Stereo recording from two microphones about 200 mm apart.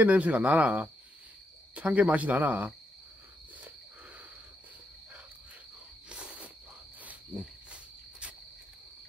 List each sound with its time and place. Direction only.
0.0 s speech: 5° right (ahead or behind)
6.0 s a sound: 5° right (ahead or behind)
7.7 s cricket: 5° right (ahead or behind)